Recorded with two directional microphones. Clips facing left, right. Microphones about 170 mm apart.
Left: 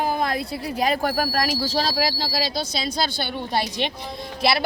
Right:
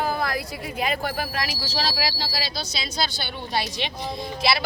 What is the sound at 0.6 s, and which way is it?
Speech, 40° left (ahead or behind).